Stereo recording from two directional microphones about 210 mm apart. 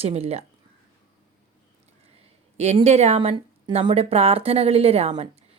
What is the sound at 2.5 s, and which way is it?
Speech, 30° right (ahead or behind).